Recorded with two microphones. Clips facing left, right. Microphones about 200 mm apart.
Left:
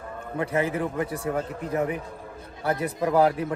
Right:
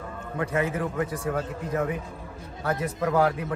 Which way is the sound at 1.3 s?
15° left (ahead or behind).